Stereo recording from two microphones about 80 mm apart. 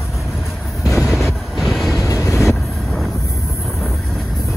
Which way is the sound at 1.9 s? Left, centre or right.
Left.